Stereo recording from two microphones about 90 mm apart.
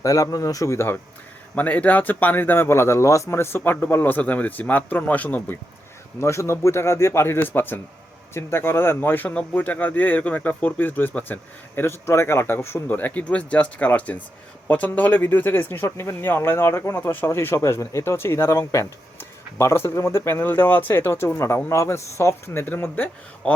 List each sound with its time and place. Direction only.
0.0 s speech: 40° left (ahead or behind)
1.5 s speech: 15° left (ahead or behind)
6.1 s speech: 30° left (ahead or behind)